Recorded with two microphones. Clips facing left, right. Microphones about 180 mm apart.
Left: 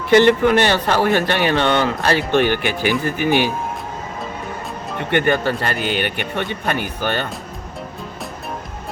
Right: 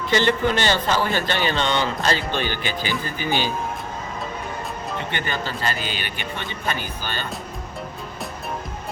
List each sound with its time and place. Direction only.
0.1 s speech: 60° left (ahead or behind)
4.9 s speech: 55° left (ahead or behind)